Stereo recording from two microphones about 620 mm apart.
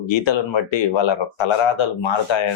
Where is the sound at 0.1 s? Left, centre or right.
Left.